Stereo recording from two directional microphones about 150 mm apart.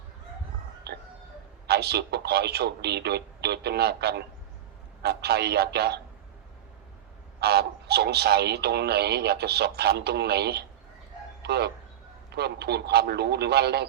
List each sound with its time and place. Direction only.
0.9 s a sound: 90° right
1.6 s speech: 90° right
7.3 s speech: 90° right